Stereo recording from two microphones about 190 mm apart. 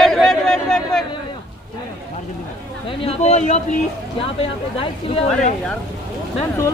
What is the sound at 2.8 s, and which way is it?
Speech, 30° left (ahead or behind).